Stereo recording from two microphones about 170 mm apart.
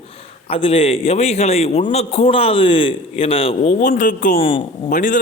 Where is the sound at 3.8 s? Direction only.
50° left (ahead or behind).